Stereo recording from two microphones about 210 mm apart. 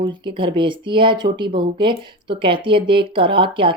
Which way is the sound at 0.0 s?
20° right (ahead or behind).